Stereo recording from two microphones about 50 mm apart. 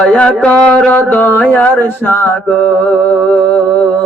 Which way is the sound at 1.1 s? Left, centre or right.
Left.